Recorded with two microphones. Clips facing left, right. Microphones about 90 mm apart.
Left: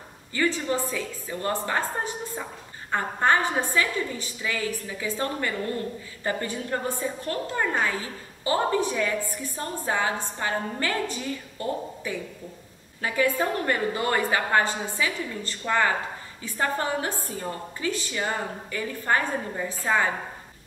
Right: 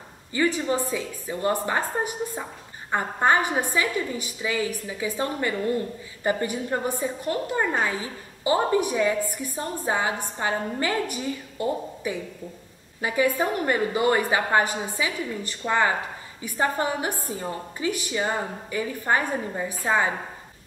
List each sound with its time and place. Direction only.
0.3 s a woman's voice: 15° right (ahead or behind)